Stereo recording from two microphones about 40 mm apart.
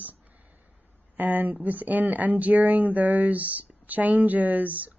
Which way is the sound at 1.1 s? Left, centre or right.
Right.